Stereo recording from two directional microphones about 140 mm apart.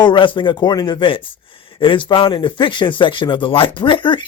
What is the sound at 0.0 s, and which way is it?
Speech, 35° left (ahead or behind).